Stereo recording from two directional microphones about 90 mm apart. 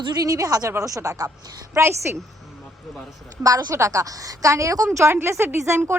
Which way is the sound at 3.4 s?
40° right (ahead or behind).